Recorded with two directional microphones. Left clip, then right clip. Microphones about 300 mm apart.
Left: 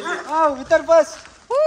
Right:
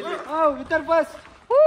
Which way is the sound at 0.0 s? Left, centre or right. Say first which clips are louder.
Left 3 dB; centre.